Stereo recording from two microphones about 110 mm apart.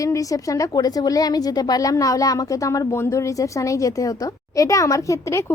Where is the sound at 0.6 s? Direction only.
35° left (ahead or behind).